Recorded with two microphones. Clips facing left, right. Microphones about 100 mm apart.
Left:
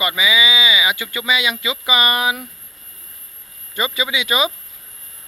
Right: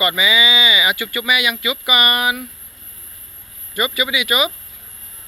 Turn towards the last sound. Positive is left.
turn(degrees=25)  # may be behind; listen again after turning